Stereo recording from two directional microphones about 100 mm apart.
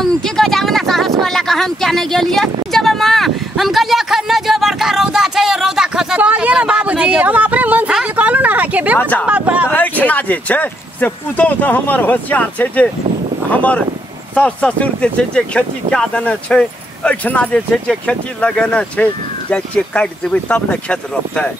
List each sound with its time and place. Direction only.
0.0 s a sound: 5° left (ahead or behind); by 9.0 s 15° right (ahead or behind)
9.2 s speech: 15° right (ahead or behind)
9.7 s speech: 15° left (ahead or behind)